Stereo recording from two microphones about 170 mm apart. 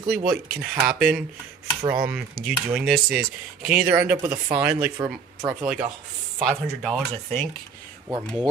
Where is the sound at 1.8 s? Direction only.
25° right (ahead or behind).